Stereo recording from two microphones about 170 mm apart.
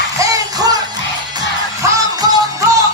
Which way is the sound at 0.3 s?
20° right (ahead or behind).